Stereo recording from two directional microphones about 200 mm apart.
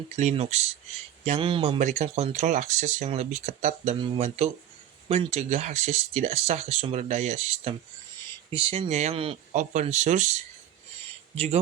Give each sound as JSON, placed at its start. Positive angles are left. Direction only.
{"t": 0.2, "sound": "speech", "side_deg": -35}
{"t": 11.3, "sound": "speech", "side_deg": -30}